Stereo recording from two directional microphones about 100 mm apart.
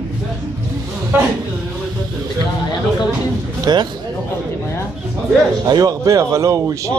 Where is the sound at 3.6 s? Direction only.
45° right (ahead or behind).